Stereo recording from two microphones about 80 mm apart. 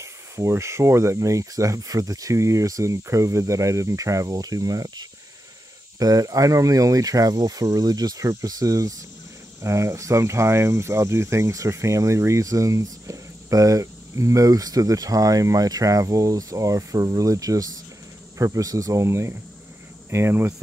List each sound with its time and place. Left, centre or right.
0.0 s speech: right